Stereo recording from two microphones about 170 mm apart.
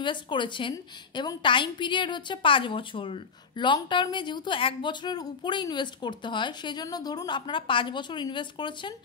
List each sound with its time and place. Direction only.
0.0 s a woman's voice: 30° left (ahead or behind)